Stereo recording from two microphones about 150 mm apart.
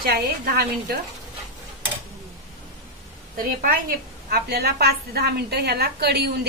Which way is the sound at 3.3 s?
70° right (ahead or behind).